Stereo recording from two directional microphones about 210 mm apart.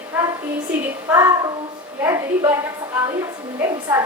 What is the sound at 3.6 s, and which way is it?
Speech, 15° right (ahead or behind).